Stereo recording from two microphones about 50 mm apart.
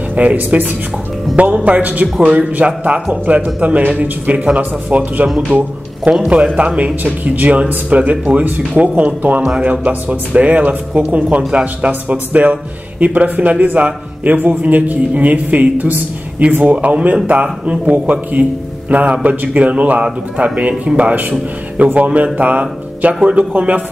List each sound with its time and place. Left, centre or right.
0.1 s a man's voice: right